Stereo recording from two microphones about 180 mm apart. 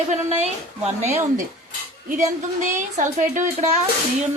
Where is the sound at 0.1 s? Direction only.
35° right (ahead or behind).